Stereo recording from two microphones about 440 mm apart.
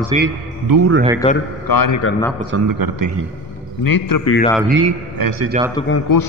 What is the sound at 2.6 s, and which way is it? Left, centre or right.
Speech, right.